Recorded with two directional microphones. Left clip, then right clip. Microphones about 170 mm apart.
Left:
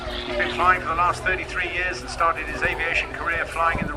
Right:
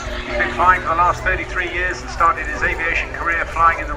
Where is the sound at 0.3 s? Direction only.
50° left (ahead or behind).